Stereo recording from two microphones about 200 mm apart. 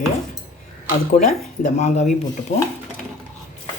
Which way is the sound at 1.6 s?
35° left (ahead or behind).